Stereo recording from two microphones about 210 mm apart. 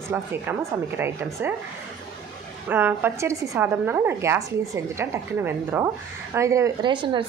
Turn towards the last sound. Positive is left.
turn(degrees=-25)  # may be behind; listen again after turning